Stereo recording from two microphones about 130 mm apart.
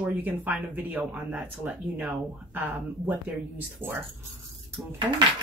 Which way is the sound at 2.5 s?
10° right (ahead or behind).